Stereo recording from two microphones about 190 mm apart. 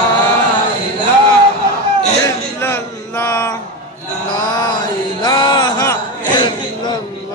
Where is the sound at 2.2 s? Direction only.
10° left (ahead or behind).